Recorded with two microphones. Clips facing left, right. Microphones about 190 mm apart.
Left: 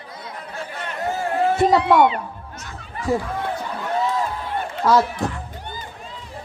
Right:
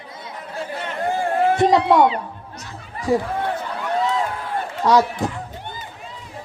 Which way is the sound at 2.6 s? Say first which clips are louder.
Left 1 dB; 30° right (ahead or behind).